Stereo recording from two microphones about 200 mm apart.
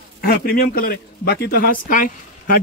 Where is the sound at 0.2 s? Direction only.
50° left (ahead or behind).